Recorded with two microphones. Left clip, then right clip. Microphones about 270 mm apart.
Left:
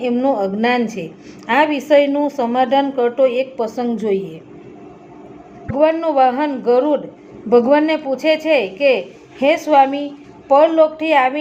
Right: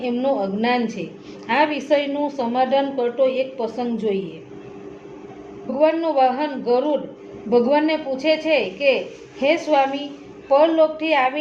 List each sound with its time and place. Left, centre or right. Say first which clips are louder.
0.0 s a woman's voice: left 4 dB; left
5.7 s a woman's voice: left 3 dB; left